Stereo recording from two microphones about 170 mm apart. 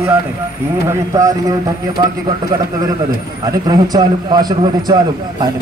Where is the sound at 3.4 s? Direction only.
25° right (ahead or behind).